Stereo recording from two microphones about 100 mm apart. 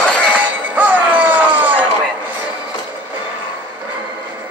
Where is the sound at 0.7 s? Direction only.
20° right (ahead or behind).